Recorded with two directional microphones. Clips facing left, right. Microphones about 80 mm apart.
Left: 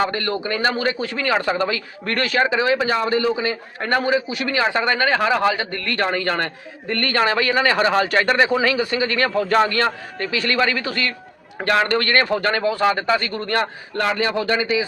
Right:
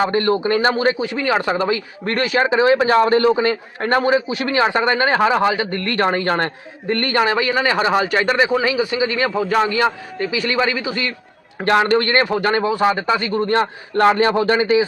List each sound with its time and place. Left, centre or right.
0.0 s a man's voice: right
2.7 s a man's voice: right
3.8 s a man's voice: right